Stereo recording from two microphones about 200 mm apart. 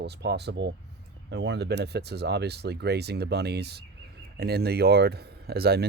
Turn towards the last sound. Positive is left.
turn(degrees=-50)  # may be behind; listen again after turning